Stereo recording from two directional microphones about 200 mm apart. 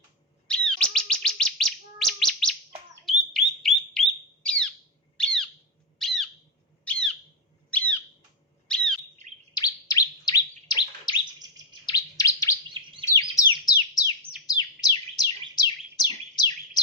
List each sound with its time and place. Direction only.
0.4 s bird: 5° left (ahead or behind)
9.6 s bird: 20° left (ahead or behind)
11.3 s bird: 20° right (ahead or behind)
11.9 s chirp: 15° left (ahead or behind)
13.1 s bird: 15° left (ahead or behind)